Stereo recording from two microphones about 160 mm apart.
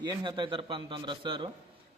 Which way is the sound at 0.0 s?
30° right (ahead or behind).